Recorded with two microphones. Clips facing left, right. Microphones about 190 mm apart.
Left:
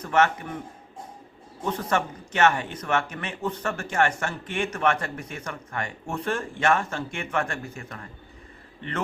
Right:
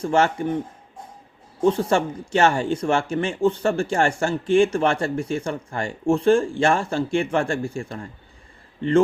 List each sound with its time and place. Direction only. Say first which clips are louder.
0.0 s speech: right 3 dB; 30° right (ahead or behind)
1.6 s speech: right 8 dB; 30° right (ahead or behind)